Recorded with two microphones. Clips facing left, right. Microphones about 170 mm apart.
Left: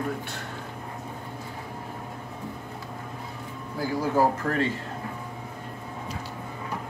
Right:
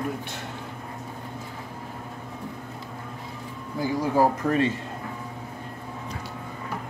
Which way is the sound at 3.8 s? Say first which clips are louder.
Right 2 dB; 20° right (ahead or behind).